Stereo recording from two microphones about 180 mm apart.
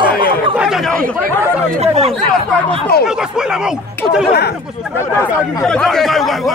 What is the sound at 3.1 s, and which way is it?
Speech, 5° right (ahead or behind).